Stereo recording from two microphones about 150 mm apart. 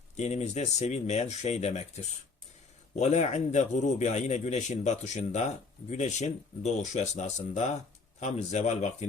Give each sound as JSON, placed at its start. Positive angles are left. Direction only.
{"t": 0.2, "sound": "a man's voice", "side_deg": 45}
{"t": 2.9, "sound": "a man's voice", "side_deg": 50}